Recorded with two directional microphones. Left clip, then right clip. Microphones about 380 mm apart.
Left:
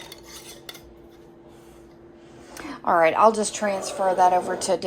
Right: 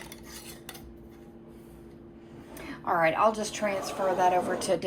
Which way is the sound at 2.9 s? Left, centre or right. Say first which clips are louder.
Left 7 dB; centre.